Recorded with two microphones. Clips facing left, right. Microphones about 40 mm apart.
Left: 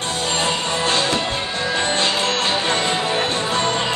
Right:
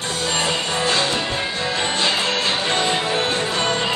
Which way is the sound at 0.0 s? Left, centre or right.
Left.